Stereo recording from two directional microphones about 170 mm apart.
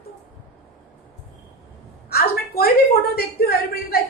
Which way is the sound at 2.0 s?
65° left (ahead or behind).